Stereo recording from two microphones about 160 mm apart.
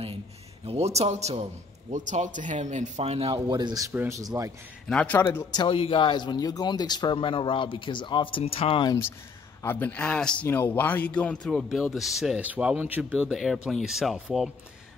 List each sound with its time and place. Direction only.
0.7 s a man's voice: 40° right (ahead or behind); by 4.5 s 20° right (ahead or behind)
4.8 s a man's voice: 10° left (ahead or behind)
5.5 s speech: 30° left (ahead or behind)
9.6 s a man's voice: 10° left (ahead or behind); by 13.2 s 10° right (ahead or behind)
13.2 s a man's voice: centre (ahead or behind)